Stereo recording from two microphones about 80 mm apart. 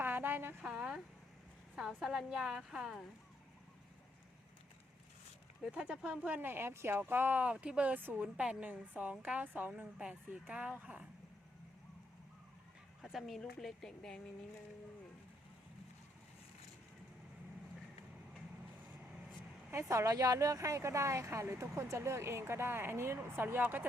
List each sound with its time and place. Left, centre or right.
0.0 s a sound: right
0.6 s a sound: centre
1.7 s a woman's voice: centre
5.6 s speech: centre
13.0 s a woman's voice: centre
19.9 s speech: right